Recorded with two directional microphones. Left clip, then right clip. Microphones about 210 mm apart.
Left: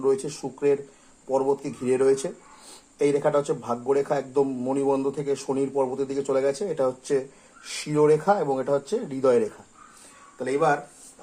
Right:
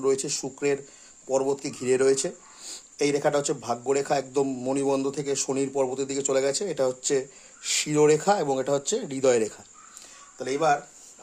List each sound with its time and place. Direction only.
0.0 s a man's voice: 40° right (ahead or behind)
10.3 s speech: 30° right (ahead or behind)